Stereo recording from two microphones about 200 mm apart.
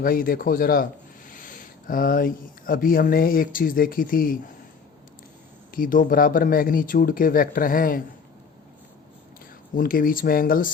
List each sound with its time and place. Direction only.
0.0 s speech: 45° left (ahead or behind)
5.7 s speech: 45° left (ahead or behind)
9.7 s speech: 45° left (ahead or behind)